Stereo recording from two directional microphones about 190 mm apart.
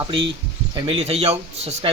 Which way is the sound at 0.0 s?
25° right (ahead or behind).